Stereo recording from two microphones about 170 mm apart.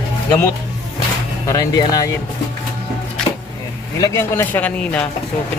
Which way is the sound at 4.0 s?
15° left (ahead or behind).